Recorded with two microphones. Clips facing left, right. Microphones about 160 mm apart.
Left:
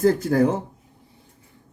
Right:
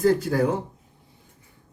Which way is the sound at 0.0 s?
50° left (ahead or behind).